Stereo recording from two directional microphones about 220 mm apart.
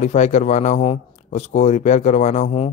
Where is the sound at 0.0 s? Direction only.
30° left (ahead or behind).